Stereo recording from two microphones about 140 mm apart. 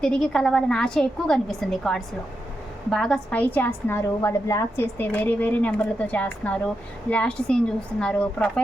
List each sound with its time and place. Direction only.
0.0 s a woman's voice: 5° left (ahead or behind)